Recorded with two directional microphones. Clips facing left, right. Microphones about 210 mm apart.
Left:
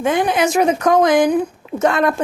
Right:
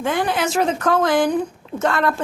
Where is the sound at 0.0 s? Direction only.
20° left (ahead or behind).